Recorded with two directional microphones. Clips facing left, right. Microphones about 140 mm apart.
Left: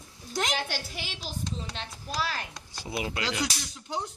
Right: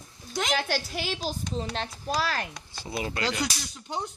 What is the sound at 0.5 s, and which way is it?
A woman's voice, 45° right (ahead or behind).